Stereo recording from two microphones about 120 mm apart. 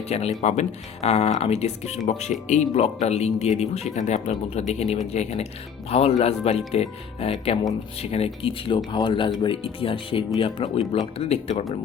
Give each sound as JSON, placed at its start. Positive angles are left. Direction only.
{"t": 0.1, "sound": "speech", "side_deg": 65}
{"t": 1.0, "sound": "speech", "side_deg": 60}
{"t": 10.9, "sound": "speech", "side_deg": 60}